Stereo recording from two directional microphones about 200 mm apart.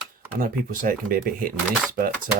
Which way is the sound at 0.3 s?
45° right (ahead or behind).